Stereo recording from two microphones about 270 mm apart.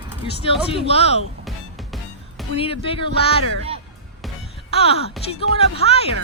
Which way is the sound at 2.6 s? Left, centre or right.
Left.